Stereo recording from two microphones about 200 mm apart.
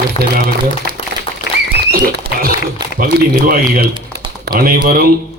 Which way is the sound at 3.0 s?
45° right (ahead or behind).